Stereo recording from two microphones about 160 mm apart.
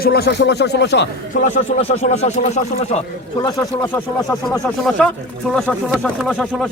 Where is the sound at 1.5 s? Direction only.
45° left (ahead or behind).